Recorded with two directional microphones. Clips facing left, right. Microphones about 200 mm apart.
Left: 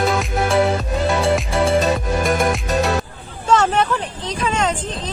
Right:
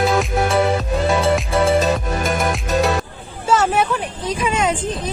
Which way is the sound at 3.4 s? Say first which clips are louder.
Even; 5° right (ahead or behind).